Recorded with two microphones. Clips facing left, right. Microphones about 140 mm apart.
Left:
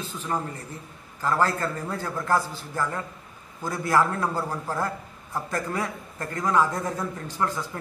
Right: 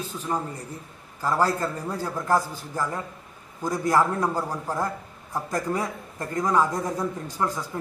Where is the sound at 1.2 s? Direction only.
10° right (ahead or behind).